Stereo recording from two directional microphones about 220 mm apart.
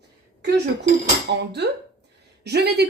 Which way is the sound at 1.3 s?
50° right (ahead or behind).